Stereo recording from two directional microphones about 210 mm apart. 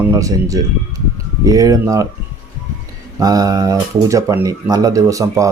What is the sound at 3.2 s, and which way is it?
Speech, 15° right (ahead or behind).